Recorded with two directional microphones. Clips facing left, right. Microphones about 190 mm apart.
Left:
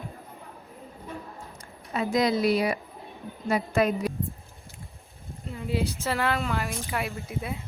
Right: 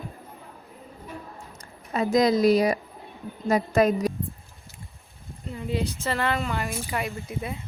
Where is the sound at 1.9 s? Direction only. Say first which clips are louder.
Right 4 dB; 40° right (ahead or behind).